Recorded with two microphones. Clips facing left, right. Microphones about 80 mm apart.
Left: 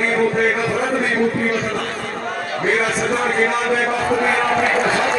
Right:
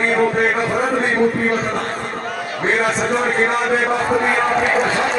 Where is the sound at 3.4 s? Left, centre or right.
Right.